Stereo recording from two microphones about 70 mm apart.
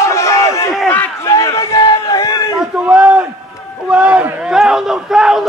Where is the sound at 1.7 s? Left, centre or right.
Left.